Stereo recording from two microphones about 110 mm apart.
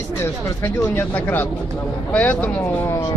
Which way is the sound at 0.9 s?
20° left (ahead or behind).